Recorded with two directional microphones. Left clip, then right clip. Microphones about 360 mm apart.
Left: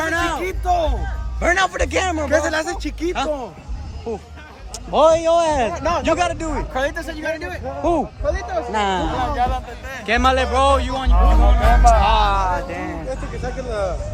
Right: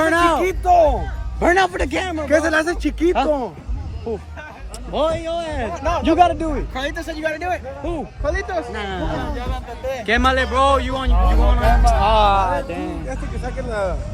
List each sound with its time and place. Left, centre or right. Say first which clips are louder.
0.0 s a sound: right 5 dB; centre
1.4 s speech: right 1 dB; centre
2.3 s speech: right 5 dB; right
4.1 s a man's voice: right 1 dB; centre
5.7 s speech: left 1 dB; left
6.1 s speech: right 4 dB; centre
8.2 s speech: even; right
8.7 s a man's voice: left 5 dB; centre
9.8 s speech: even; centre
13.1 s a sound: left 2 dB; centre